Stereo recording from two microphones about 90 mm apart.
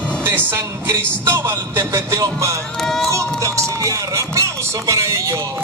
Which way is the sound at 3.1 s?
35° right (ahead or behind).